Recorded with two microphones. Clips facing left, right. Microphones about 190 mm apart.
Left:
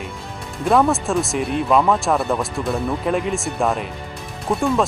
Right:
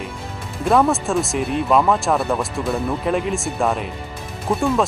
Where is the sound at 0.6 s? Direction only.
Centre (ahead or behind).